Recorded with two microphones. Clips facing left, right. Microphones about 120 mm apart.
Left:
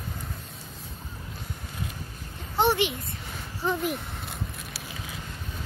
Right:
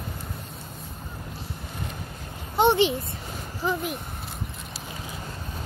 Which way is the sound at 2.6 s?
25° right (ahead or behind).